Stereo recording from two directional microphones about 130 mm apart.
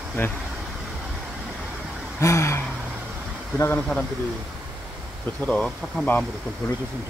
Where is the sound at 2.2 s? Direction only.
20° left (ahead or behind).